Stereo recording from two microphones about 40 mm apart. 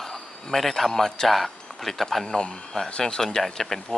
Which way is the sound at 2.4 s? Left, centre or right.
Left.